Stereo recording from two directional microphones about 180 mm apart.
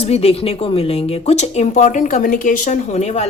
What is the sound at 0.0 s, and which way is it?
Speech, 35° left (ahead or behind).